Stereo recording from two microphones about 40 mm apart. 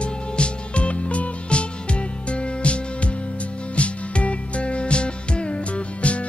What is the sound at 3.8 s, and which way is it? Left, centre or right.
Music, left.